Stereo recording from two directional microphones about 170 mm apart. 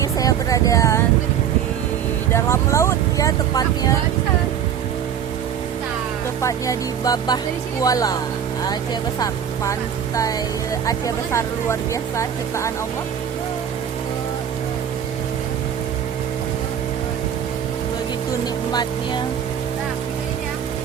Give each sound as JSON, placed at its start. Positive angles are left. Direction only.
{"t": 0.0, "sound": "speech", "side_deg": 20}
{"t": 2.3, "sound": "speech", "side_deg": 15}
{"t": 6.4, "sound": "speech", "side_deg": 20}
{"t": 10.8, "sound": "speech", "side_deg": 20}
{"t": 18.7, "sound": "speech", "side_deg": 25}